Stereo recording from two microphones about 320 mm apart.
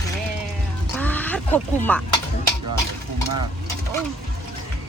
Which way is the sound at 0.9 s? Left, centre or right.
Centre.